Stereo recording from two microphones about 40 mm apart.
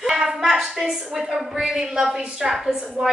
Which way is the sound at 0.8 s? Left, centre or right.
Centre.